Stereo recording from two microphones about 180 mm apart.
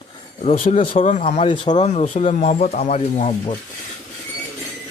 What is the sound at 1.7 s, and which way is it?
Speech, 40° left (ahead or behind).